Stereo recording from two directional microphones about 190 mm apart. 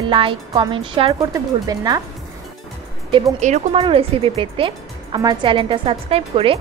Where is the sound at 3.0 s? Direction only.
25° right (ahead or behind).